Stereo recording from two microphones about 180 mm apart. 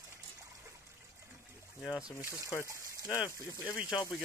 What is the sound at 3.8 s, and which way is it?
Speech, 5° right (ahead or behind).